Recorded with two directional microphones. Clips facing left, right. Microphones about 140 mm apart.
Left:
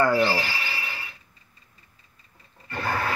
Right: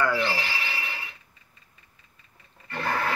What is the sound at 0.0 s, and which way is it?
Speech, 40° left (ahead or behind).